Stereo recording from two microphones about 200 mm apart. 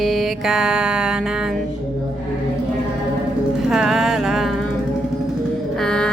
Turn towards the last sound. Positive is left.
turn(degrees=5)  # may be behind; listen again after turning